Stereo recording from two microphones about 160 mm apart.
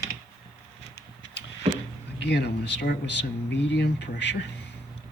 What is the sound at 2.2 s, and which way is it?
Speech, 90° left.